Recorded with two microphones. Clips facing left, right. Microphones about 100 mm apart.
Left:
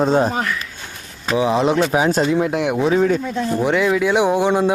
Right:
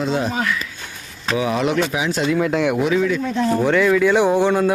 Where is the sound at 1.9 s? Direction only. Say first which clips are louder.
Left 4 dB; 40° left (ahead or behind).